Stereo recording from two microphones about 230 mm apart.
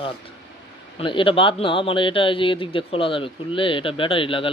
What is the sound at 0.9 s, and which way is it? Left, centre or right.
A man's voice, left.